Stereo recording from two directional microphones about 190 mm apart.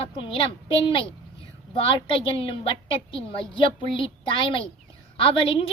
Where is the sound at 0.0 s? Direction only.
30° left (ahead or behind).